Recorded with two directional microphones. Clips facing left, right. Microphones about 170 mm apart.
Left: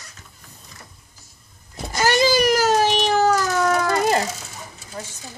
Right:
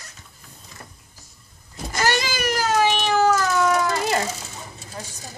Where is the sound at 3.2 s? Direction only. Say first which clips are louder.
Right 2 dB; 40° left (ahead or behind).